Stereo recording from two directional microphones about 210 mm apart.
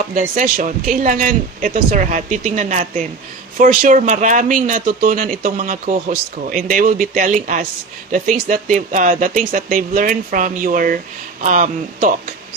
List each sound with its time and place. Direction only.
0.1 s speech: 40° right (ahead or behind)